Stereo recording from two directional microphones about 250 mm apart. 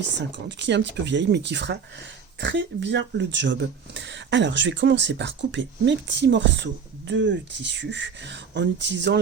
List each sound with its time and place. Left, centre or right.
0.2 s speech: right